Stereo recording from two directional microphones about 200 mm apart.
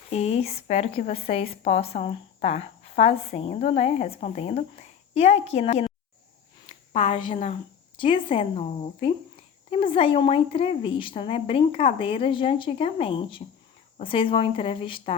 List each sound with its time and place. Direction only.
0.1 s a woman's voice: 30° left (ahead or behind)